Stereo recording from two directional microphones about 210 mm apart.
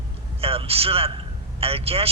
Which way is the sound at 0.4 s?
25° right (ahead or behind).